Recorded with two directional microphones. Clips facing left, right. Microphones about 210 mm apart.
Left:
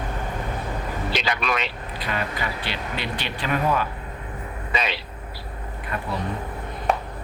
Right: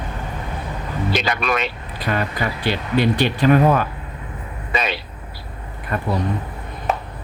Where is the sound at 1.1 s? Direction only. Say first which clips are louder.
Right 5 dB; 50° right (ahead or behind).